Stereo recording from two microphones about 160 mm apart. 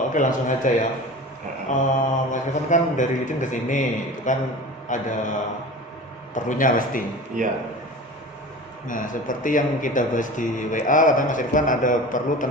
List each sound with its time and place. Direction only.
0.1 s speech: 55° left (ahead or behind)
2.0 s a man's voice: 50° left (ahead or behind)
7.4 s speech: 55° right (ahead or behind)
8.9 s a man's voice: 55° left (ahead or behind)